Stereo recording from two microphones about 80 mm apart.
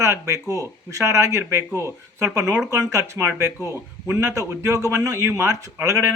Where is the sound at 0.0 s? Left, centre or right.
Right.